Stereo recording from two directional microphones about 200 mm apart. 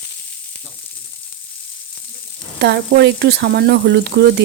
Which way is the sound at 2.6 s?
60° right (ahead or behind).